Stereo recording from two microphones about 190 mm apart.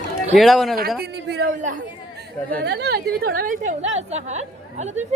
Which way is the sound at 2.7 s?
60° right (ahead or behind).